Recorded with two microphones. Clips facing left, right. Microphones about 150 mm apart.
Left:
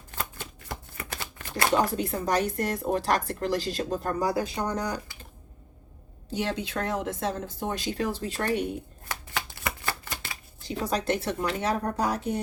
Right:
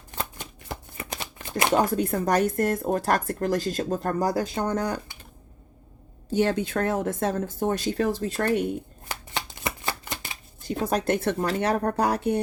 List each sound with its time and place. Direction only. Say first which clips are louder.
0.1 s shuffling cards: right 2 dB; 20° right (ahead or behind)
2.0 s speech: right 4 dB; 50° right (ahead or behind)
6.3 s speech: right 6 dB; 50° right (ahead or behind)
9.0 s shuffling cards: left 1 dB; 25° right (ahead or behind)
10.8 s speech: right 3 dB; 55° right (ahead or behind)